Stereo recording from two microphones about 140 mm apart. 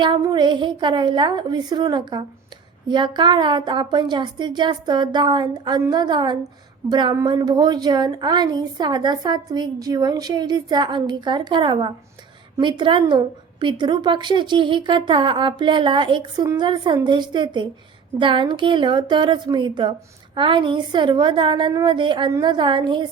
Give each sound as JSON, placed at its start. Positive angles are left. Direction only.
{"t": 0.0, "sound": "a woman's voice", "side_deg": -30}